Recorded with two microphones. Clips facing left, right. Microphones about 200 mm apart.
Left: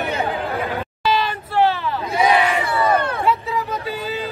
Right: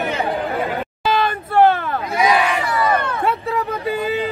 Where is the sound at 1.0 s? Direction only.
55° right (ahead or behind).